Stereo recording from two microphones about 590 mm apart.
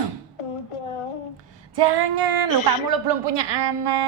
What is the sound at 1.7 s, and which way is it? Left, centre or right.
A woman's voice, right.